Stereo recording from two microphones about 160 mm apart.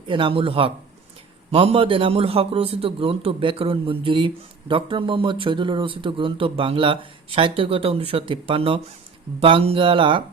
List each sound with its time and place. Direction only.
0.1 s a man's voice: 35° right (ahead or behind)